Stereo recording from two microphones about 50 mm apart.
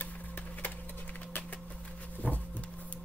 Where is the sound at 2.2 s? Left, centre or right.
Left.